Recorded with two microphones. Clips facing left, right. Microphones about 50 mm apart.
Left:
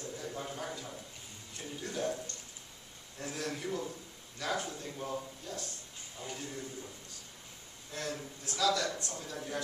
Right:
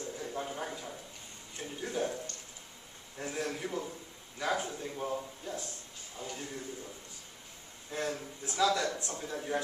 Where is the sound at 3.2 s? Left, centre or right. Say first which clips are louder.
Right 2 dB; centre.